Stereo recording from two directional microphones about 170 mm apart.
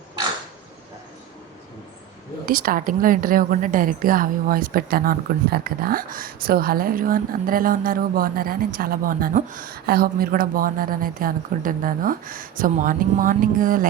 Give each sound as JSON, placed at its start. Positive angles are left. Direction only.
{"t": 2.5, "sound": "a woman's voice", "side_deg": -55}